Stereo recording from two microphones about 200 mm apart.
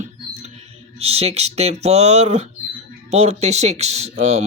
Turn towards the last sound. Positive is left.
turn(degrees=-35)  # may be behind; listen again after turning